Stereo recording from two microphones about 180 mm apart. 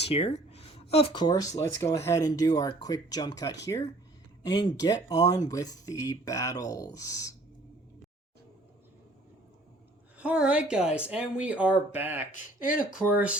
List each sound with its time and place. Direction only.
0.0 s speech: 30° left (ahead or behind)
10.2 s speech: 5° right (ahead or behind)